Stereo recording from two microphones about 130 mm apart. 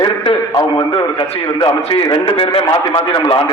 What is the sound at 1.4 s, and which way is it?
Speech, 30° left (ahead or behind).